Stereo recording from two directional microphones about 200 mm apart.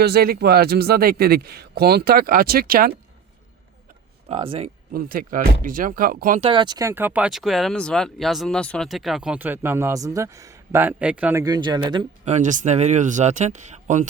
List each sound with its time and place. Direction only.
0.0 s a man's voice: 50° right (ahead or behind)
4.3 s speech: 25° right (ahead or behind)
4.9 s a man's voice: 45° right (ahead or behind)
6.4 s speech: 25° right (ahead or behind)
12.2 s speech: 35° right (ahead or behind)